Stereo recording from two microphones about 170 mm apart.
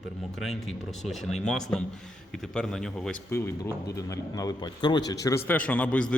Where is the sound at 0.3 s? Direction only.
Centre (ahead or behind).